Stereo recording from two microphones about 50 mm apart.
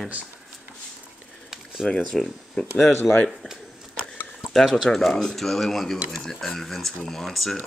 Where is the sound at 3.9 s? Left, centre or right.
Centre.